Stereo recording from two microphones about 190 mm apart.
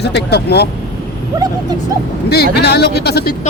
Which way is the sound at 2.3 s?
60° left (ahead or behind).